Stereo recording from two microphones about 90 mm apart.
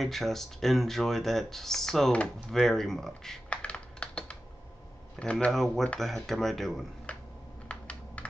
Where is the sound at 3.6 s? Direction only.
15° left (ahead or behind).